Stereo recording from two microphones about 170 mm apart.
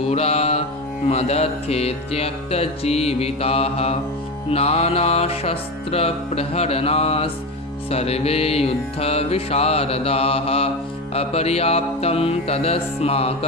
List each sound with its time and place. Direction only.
0.1 s mantra: 35° left (ahead or behind)
1.0 s music: 40° left (ahead or behind)